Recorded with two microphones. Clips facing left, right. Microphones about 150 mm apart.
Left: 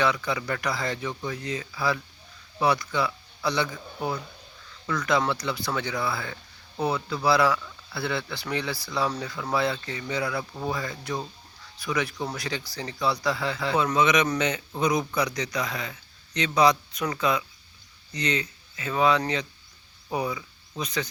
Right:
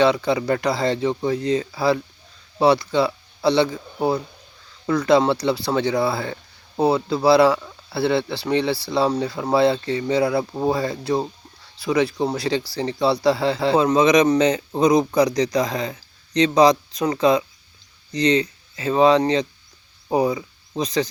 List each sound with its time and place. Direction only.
0.0 s speech: 30° right (ahead or behind)